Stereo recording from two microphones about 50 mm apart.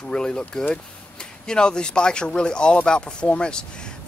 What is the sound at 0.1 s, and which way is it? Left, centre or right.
Speech, centre.